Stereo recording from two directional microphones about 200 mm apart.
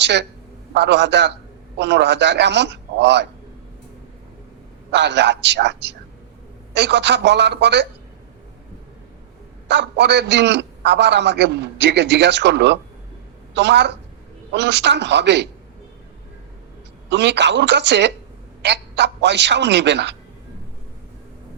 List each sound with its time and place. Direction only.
0.0 s a man's voice: 60° right (ahead or behind)
4.9 s a man's voice: 60° right (ahead or behind)
9.6 s a man's voice: 60° right (ahead or behind)
17.1 s a man's voice: 60° right (ahead or behind)